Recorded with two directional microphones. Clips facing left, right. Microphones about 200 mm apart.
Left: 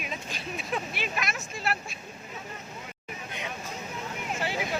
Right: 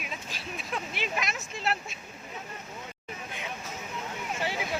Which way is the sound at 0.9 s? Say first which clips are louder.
Even; 20° right (ahead or behind).